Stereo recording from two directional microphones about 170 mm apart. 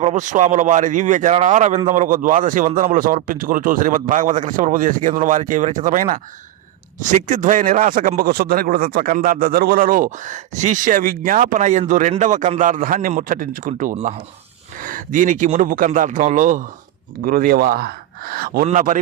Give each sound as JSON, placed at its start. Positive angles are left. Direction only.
{"t": 0.0, "sound": "speech", "side_deg": -45}
{"t": 7.3, "sound": "speech", "side_deg": -50}
{"t": 14.8, "sound": "speech", "side_deg": -50}